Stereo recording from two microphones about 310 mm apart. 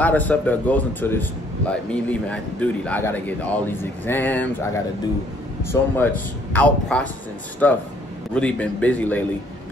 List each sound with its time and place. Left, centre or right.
0.0 s a man's voice: centre
5.7 s a man's voice: centre